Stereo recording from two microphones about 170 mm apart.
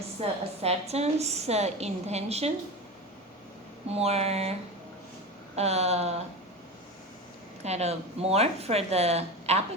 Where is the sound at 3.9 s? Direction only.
35° right (ahead or behind).